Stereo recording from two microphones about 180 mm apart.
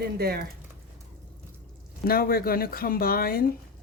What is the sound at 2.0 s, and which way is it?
Speech, 55° left (ahead or behind).